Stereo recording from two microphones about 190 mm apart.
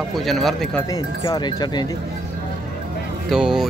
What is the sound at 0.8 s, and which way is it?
Speech, 20° left (ahead or behind).